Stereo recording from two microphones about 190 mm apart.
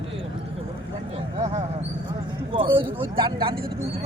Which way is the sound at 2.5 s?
25° right (ahead or behind).